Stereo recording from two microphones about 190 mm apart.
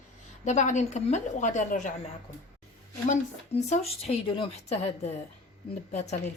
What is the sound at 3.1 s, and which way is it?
Speech, 35° left (ahead or behind).